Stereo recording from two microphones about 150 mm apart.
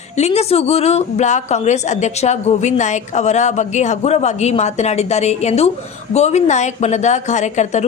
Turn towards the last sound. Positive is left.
turn(degrees=50)  # may be behind; listen again after turning